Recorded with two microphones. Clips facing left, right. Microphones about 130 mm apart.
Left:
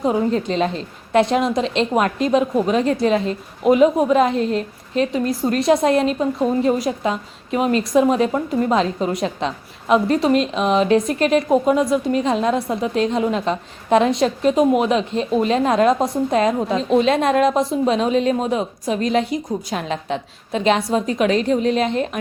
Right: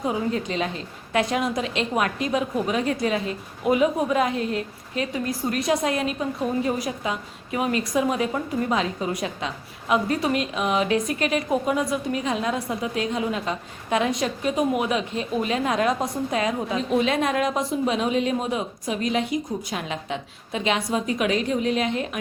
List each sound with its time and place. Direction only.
0.1 s a woman's voice: 35° left (ahead or behind)